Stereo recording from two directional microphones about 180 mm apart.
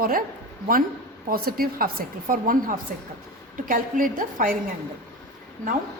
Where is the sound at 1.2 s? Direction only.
55° right (ahead or behind).